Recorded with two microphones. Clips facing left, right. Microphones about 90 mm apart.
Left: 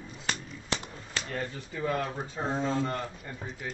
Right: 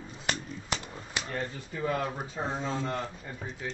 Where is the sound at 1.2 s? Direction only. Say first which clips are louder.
Even; centre (ahead or behind).